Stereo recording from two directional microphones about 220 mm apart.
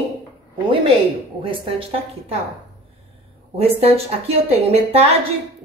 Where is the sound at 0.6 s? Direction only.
20° right (ahead or behind).